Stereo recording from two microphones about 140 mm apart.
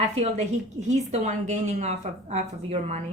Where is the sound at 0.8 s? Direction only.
55° right (ahead or behind).